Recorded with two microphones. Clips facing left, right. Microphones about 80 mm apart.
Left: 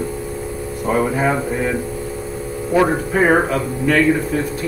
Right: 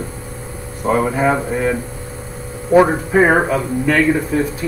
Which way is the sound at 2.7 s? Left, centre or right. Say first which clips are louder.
Right 4 dB; centre.